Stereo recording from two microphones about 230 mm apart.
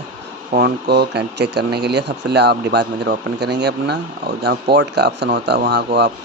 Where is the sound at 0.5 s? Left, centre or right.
Right.